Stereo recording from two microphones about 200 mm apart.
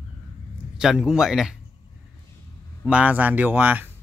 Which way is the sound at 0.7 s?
5° right (ahead or behind).